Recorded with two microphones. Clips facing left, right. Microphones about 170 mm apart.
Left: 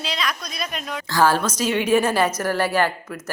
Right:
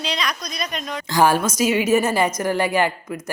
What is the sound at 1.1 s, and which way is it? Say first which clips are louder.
Speech: right 1 dB; 15° right (ahead or behind).